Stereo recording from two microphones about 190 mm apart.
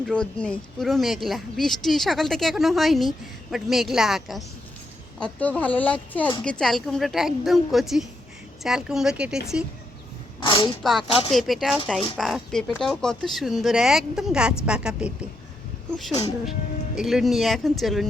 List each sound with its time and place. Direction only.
0.0 s speech: 5° left (ahead or behind)
10.4 s speech: 25° left (ahead or behind)
11.3 s speech: centre (ahead or behind)
16.5 s speech: centre (ahead or behind)